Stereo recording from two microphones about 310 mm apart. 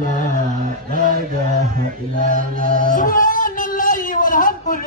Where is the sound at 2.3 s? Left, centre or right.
Right.